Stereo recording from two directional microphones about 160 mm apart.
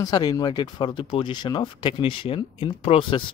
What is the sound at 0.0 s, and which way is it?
Speech, 25° left (ahead or behind).